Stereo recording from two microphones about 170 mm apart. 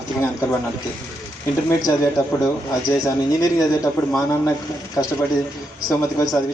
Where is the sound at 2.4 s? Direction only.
20° left (ahead or behind).